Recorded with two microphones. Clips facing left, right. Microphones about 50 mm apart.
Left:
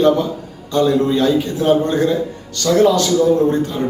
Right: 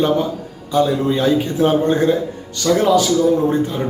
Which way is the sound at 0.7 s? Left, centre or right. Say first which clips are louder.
Left 1 dB; centre.